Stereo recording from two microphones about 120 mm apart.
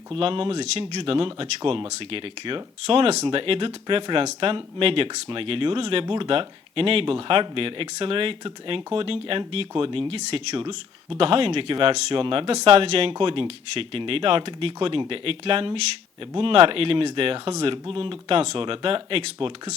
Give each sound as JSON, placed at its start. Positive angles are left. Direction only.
{"t": 0.1, "sound": "speech", "side_deg": -50}